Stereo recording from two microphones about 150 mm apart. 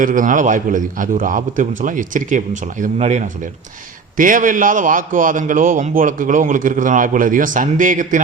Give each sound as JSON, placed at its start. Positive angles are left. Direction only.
{"t": 0.0, "sound": "a man's voice", "side_deg": -60}
{"t": 4.2, "sound": "a man's voice", "side_deg": -60}